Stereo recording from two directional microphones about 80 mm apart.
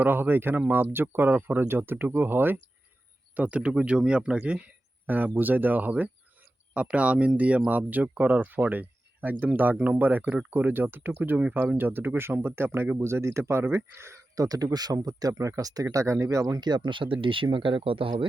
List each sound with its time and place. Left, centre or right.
0.0 s speech: right
3.3 s speech: centre; by 14.2 s right
14.3 s speech: right
16.6 s speech: right